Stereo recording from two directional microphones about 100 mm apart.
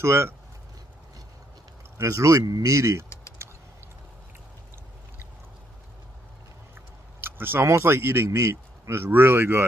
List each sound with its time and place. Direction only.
0.0 s speech: 25° right (ahead or behind)
2.0 s speech: 30° right (ahead or behind)
7.2 s speech: 20° right (ahead or behind)